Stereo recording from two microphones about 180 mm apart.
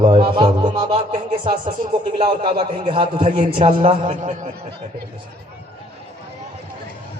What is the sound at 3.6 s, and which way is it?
Speech, 35° right (ahead or behind).